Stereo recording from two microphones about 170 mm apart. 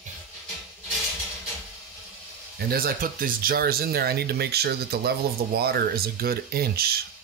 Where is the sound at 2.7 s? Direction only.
60° right (ahead or behind).